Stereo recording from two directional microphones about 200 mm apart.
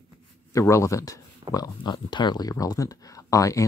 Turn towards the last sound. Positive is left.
turn(degrees=15)  # may be behind; listen again after turning